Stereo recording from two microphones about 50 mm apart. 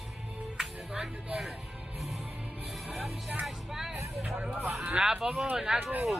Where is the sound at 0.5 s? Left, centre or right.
Centre.